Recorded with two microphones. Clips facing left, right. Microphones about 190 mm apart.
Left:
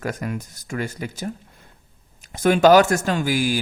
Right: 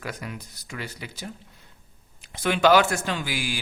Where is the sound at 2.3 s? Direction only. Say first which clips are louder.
Left 5 dB; 45° left (ahead or behind).